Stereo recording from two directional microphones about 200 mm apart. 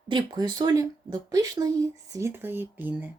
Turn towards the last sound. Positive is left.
turn(degrees=-10)  # may be behind; listen again after turning